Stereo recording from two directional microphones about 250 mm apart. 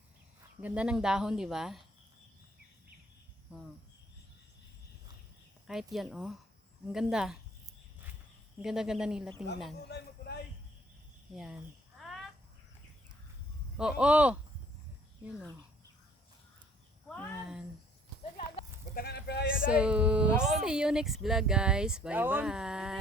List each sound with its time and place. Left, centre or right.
0.6 s speech: centre
5.6 s speech: centre
8.6 s speech: centre
9.8 s a sound: left
11.9 s a sound: centre
13.7 s speech: centre
17.1 s speech: centre
18.9 s speech: left
19.6 s speech: centre